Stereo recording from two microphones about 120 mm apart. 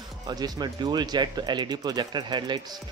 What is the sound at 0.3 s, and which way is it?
Speech, 35° right (ahead or behind).